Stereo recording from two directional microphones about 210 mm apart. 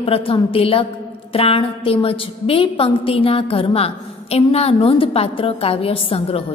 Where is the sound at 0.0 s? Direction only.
25° left (ahead or behind).